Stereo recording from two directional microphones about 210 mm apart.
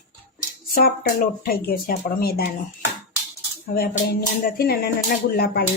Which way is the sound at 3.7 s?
45° left (ahead or behind).